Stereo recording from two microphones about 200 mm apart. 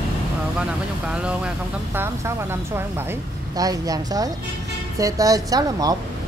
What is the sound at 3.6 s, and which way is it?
Speech, 20° right (ahead or behind).